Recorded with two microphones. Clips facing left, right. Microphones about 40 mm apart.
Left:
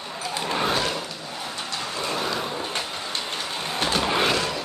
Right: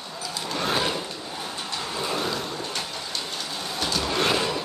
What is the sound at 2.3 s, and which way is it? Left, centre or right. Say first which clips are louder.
Vehicle: left 2 dB; centre.